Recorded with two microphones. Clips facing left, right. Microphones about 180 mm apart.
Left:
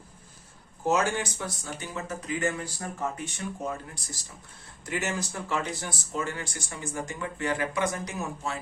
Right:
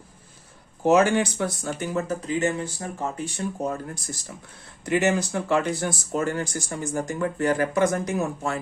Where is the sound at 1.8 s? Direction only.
40° right (ahead or behind).